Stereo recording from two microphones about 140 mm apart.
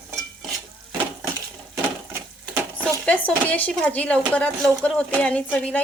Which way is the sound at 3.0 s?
10° left (ahead or behind).